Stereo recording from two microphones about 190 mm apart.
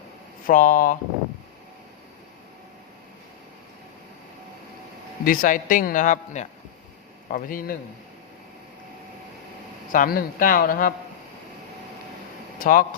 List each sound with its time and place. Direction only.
0.4 s speech: 45° left (ahead or behind)
5.2 s speech: 45° left (ahead or behind)
9.9 s speech: 45° left (ahead or behind)
12.5 s speech: 45° left (ahead or behind)